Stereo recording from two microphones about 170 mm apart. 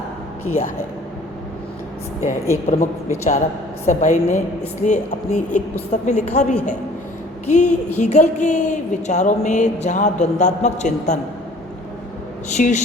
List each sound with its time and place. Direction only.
2.2 s a woman's voice: 40° left (ahead or behind)
12.5 s a woman's voice: 45° left (ahead or behind)